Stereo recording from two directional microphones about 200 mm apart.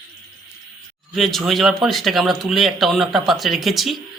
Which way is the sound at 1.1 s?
Centre (ahead or behind).